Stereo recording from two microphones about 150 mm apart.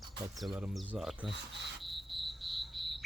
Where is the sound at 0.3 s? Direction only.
5° right (ahead or behind).